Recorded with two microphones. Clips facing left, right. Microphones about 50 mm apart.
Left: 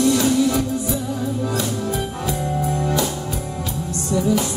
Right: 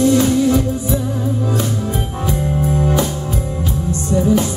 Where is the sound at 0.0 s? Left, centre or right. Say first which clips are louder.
Right 3 dB; right.